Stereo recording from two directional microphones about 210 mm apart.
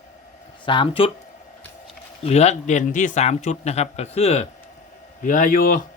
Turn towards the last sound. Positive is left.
turn(degrees=40)  # may be behind; listen again after turning